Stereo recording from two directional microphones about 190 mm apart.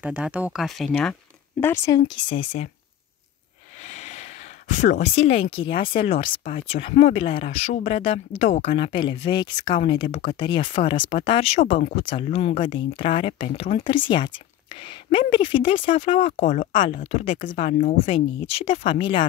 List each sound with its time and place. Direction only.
0.0 s speech: 10° right (ahead or behind); by 2.0 s 10° left (ahead or behind)
2.0 s speech: 25° left (ahead or behind)
3.8 s speech: 40° left (ahead or behind)
17.3 s speech: 45° left (ahead or behind)
17.6 s speech: 30° left (ahead or behind)